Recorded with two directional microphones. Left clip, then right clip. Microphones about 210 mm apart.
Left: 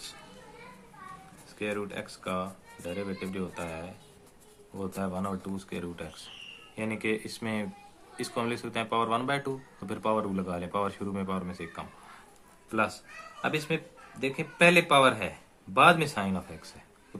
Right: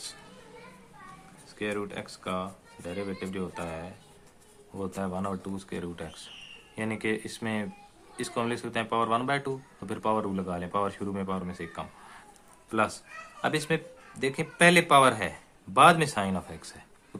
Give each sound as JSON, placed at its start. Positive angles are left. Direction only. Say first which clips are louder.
{"t": 1.5, "sound": "speech", "louder": "right 1 dB", "side_deg": -15}